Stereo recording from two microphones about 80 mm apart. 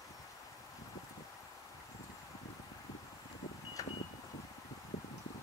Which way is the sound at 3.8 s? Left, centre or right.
Left.